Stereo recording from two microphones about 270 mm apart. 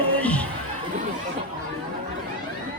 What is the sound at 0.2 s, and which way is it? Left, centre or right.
Crowd, centre.